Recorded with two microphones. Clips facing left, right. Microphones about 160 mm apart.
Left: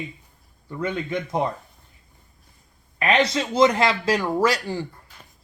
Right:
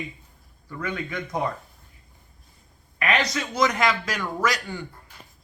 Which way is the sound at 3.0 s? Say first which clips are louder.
Left 4 dB; 25° left (ahead or behind).